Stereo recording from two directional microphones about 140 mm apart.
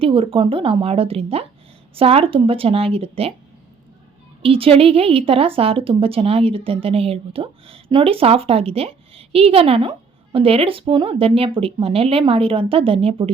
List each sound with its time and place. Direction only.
0.0 s a woman's voice: 40° right (ahead or behind)
4.4 s a woman's voice: 40° right (ahead or behind)